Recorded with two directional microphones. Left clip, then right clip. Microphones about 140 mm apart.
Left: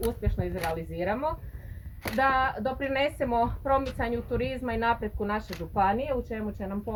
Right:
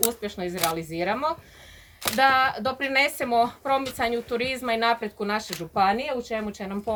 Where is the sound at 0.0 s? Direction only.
25° right (ahead or behind).